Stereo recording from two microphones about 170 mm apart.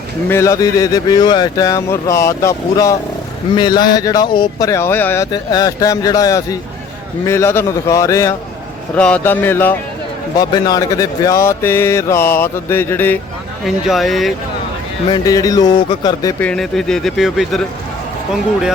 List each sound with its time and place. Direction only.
0.3 s speech: 15° left (ahead or behind)
9.0 s speech: 5° left (ahead or behind)
10.3 s speech: 25° left (ahead or behind)
13.7 s speech: centre (ahead or behind)
15.1 s speech: 20° left (ahead or behind)
16.4 s speech: 5° left (ahead or behind)